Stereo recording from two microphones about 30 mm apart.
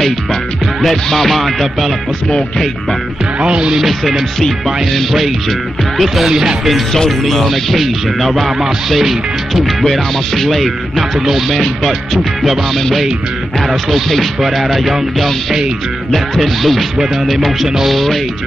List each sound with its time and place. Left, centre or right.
0.8 s music: centre
3.3 s music: right
4.6 s music: centre
6.2 s speech: centre
7.1 s music: centre
11.5 s music: centre
13.7 s music: centre